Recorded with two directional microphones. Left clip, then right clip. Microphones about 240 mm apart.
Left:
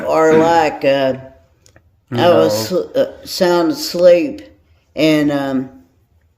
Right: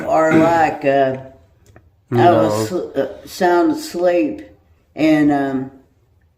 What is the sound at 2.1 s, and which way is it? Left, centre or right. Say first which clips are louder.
Speech: left 1 dB; left.